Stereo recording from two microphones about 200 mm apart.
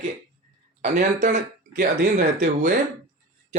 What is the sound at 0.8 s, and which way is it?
Speech, 40° right (ahead or behind).